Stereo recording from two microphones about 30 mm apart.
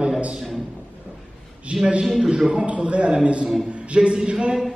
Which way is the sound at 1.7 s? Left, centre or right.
Right.